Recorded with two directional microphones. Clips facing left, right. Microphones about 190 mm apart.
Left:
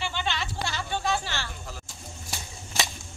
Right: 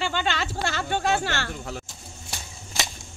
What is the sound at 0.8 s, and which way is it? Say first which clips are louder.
Speech: right 4 dB; 55° right (ahead or behind).